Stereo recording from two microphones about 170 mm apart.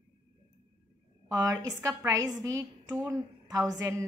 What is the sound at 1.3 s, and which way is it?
A woman's voice, 20° right (ahead or behind).